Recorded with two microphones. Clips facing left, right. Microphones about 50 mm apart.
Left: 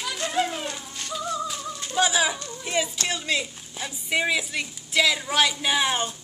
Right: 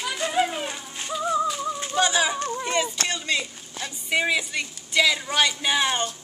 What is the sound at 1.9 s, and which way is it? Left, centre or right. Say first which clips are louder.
A child's voice: even; centre.